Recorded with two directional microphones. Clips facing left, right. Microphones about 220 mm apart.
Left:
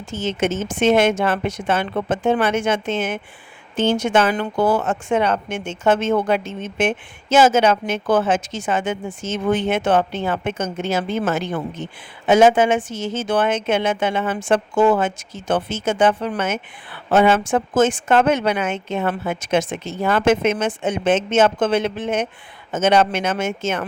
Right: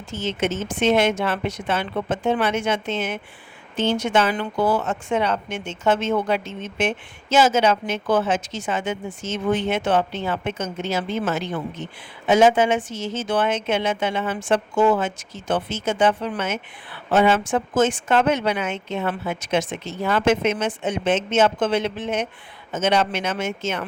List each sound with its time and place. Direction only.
0.1 s speech: 50° left (ahead or behind)